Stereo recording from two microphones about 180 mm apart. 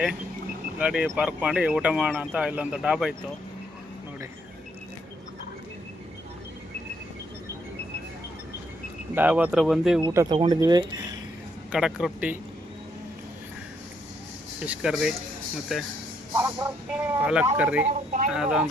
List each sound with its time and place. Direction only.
0.8 s speech: 5° right (ahead or behind)
9.1 s speech: 10° right (ahead or behind)
10.0 s speech: 25° right (ahead or behind)
11.7 s speech: 5° right (ahead or behind)
14.6 s speech: 5° right (ahead or behind)
16.3 s speech: 15° right (ahead or behind)
17.8 s speech: 40° right (ahead or behind)
18.3 s speech: 5° right (ahead or behind)